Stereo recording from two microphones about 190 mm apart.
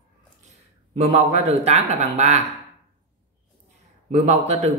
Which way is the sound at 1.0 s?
30° right (ahead or behind).